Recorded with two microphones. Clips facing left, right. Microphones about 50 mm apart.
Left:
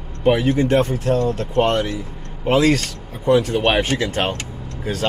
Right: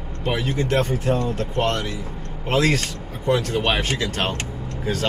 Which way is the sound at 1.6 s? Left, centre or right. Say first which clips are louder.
Left 6 dB; centre.